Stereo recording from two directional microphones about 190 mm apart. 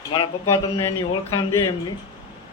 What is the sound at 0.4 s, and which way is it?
Speech, 15° left (ahead or behind).